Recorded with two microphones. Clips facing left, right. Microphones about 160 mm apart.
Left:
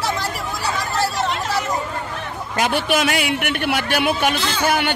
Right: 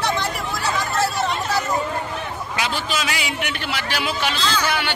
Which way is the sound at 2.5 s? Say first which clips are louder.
Left 7 dB; 55° left (ahead or behind).